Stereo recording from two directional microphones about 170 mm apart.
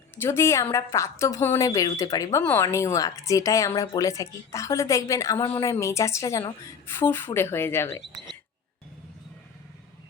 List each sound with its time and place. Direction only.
0.2 s a woman's voice: 15° left (ahead or behind)